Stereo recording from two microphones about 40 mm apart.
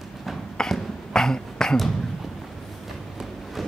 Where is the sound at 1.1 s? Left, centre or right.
Centre.